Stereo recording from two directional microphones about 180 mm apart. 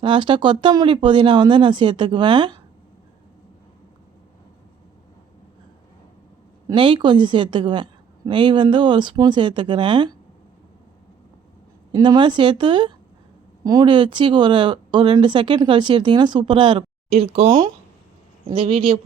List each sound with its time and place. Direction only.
0.0 s speech: 30° right (ahead or behind)
6.7 s speech: 30° right (ahead or behind)
11.9 s speech: 25° right (ahead or behind)